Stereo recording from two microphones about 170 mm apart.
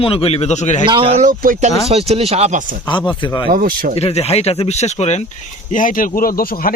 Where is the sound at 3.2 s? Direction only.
30° left (ahead or behind).